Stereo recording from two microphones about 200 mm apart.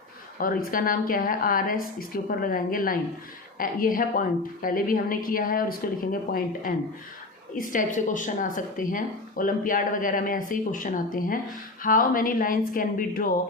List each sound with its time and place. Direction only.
0.3 s speech: 45° left (ahead or behind)